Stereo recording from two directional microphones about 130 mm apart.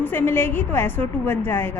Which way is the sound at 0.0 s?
15° left (ahead or behind).